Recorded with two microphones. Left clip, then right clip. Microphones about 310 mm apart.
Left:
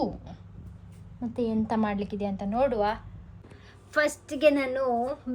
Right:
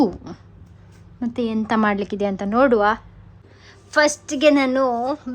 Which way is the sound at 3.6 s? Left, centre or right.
Centre.